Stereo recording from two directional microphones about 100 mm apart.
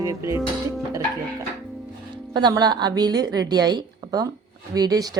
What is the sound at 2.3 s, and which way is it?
A woman's voice, 45° right (ahead or behind).